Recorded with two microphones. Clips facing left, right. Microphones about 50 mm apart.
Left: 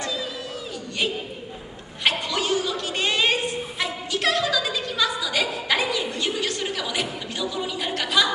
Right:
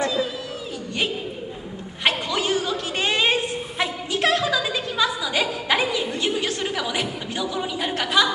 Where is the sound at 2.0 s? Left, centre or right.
Right.